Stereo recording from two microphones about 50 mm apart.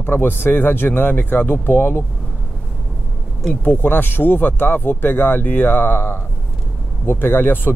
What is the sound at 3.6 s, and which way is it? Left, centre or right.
Speech, left.